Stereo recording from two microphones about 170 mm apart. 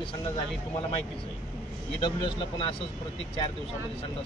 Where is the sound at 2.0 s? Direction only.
30° left (ahead or behind).